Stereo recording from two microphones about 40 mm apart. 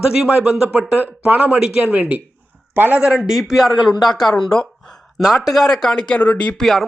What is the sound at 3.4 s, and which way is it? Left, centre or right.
Speech, centre.